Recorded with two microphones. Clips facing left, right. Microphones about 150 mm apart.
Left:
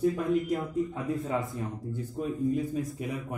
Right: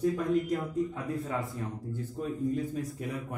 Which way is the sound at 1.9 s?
10° left (ahead or behind).